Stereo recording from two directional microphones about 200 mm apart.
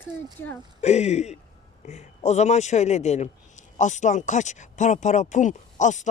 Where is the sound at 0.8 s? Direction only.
35° left (ahead or behind).